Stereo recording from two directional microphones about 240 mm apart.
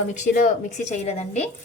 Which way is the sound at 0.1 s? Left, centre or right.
Left.